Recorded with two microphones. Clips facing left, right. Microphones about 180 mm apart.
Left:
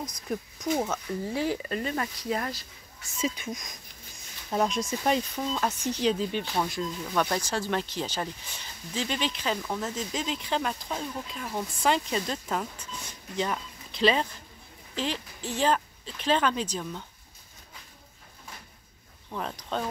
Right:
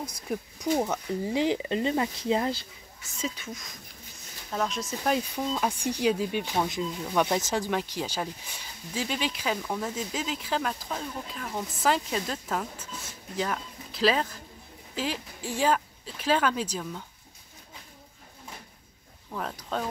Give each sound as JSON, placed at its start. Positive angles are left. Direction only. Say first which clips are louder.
{"t": 0.3, "sound": "speech", "louder": "right 1 dB", "side_deg": -15}
{"t": 3.2, "sound": "speech", "louder": "left 3 dB", "side_deg": 15}
{"t": 5.0, "sound": "speech", "louder": "right 1 dB", "side_deg": -5}
{"t": 19.3, "sound": "speech", "louder": "even", "side_deg": -5}